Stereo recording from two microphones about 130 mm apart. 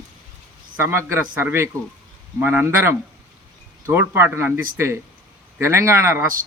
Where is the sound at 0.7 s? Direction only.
20° right (ahead or behind).